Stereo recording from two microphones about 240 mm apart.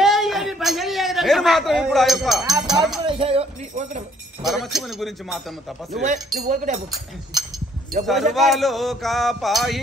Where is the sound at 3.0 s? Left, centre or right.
Right.